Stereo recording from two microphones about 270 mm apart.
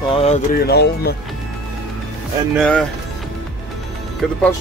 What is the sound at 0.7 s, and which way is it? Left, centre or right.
Speech, left.